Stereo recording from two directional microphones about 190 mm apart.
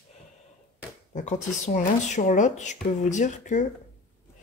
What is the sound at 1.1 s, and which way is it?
Speech, 40° left (ahead or behind).